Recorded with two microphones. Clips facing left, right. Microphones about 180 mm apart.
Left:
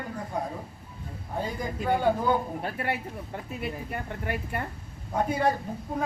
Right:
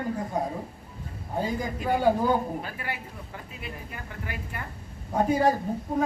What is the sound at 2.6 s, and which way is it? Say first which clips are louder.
A woman's voice: left 5 dB; 60° left (ahead or behind).